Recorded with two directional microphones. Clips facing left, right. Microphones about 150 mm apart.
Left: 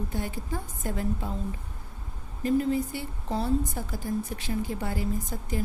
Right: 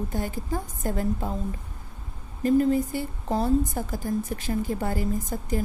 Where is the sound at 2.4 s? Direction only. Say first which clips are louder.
Right 4 dB; 45° right (ahead or behind).